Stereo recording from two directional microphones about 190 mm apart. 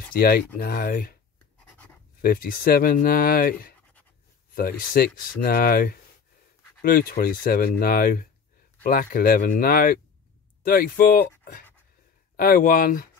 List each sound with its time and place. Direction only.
0.1 s speech: 50° left (ahead or behind)
2.2 s speech: 50° left (ahead or behind)